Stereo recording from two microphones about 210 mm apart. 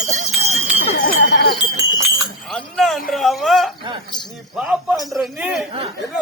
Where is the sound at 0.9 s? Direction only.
55° left (ahead or behind).